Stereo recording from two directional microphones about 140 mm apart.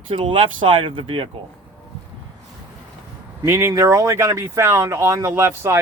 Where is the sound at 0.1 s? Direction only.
35° right (ahead or behind).